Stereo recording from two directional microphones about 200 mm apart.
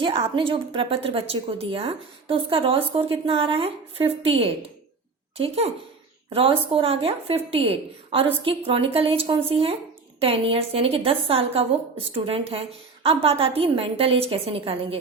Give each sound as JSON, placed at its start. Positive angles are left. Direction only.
{"t": 0.0, "sound": "a woman's voice", "side_deg": -25}